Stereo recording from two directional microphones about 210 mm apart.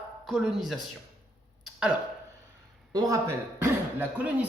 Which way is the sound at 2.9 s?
15° right (ahead or behind).